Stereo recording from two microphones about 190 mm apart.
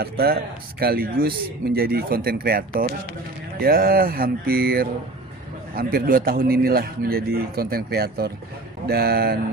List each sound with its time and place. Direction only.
0.0 s a man's voice: 55° right (ahead or behind)